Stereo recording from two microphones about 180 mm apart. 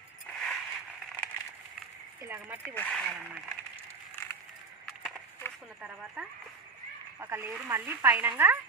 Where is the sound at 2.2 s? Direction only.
10° right (ahead or behind).